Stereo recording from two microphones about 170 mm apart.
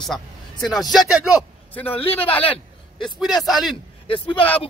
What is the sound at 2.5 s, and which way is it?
A man's voice, centre (ahead or behind).